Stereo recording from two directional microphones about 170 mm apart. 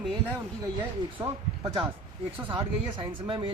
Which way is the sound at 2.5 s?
30° right (ahead or behind).